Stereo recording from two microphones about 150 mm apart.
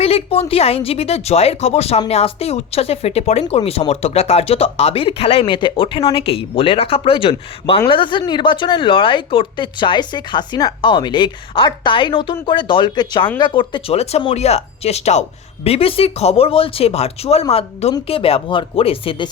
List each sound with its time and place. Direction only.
0.0 s a woman's voice: 40° left (ahead or behind)